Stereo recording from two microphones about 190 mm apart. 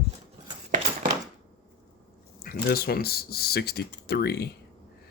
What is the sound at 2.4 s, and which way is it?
Speech, 55° left (ahead or behind).